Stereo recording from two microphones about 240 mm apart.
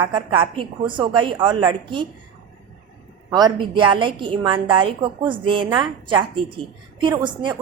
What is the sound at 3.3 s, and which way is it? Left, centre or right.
A woman's voice, centre.